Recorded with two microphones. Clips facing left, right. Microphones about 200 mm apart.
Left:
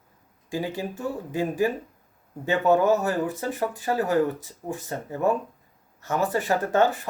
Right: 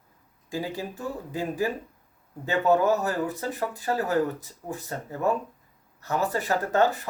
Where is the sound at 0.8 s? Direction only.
15° left (ahead or behind).